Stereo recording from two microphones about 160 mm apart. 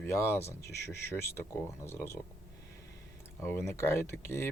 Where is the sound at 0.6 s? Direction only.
90° left.